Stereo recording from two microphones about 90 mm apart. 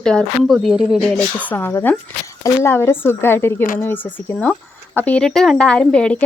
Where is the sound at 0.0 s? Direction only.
10° left (ahead or behind).